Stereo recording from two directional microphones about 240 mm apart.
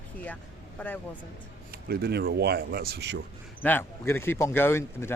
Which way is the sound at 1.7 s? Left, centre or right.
Right.